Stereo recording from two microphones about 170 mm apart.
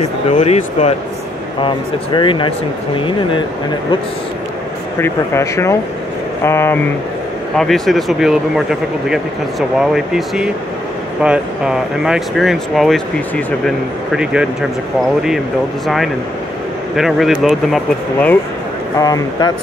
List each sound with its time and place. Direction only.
0.3 s speech: 40° left (ahead or behind)
1.6 s speech: 30° left (ahead or behind)
5.0 s speech: 15° left (ahead or behind)
7.5 s speech: centre (ahead or behind)
16.9 s speech: centre (ahead or behind)
18.9 s speech: 20° left (ahead or behind)